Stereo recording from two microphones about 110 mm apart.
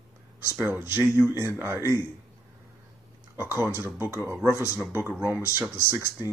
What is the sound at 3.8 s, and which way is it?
Speech, 15° right (ahead or behind).